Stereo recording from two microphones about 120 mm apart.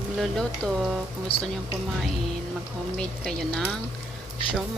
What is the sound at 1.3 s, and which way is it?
Speech, 50° left (ahead or behind).